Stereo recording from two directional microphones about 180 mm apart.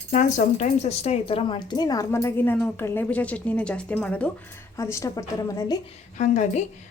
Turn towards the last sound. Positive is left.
turn(degrees=40)  # may be behind; listen again after turning